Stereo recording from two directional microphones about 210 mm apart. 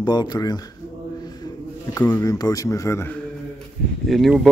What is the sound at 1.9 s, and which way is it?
Speech, 15° left (ahead or behind).